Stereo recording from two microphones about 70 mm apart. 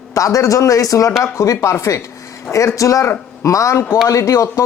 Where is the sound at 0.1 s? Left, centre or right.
Left.